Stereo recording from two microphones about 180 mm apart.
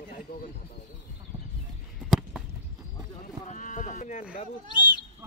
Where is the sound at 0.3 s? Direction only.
60° left (ahead or behind).